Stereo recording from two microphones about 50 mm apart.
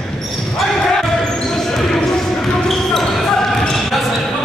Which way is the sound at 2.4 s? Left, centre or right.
Centre.